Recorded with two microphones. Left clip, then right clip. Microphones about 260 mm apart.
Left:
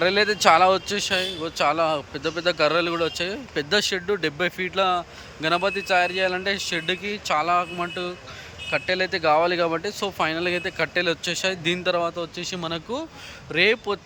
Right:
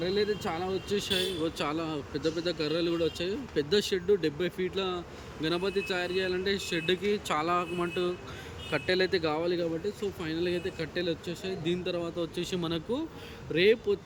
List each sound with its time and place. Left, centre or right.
0.0 s speech: left
0.9 s a man's voice: centre